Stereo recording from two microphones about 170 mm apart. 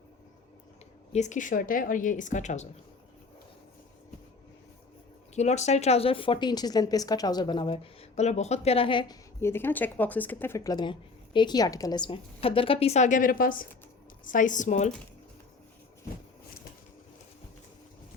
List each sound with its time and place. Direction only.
1.1 s a woman's voice: 45° left (ahead or behind)
5.3 s speech: 40° left (ahead or behind)
8.1 s a woman's voice: 40° left (ahead or behind)
9.4 s a woman's voice: 15° left (ahead or behind); by 14.9 s 45° left (ahead or behind)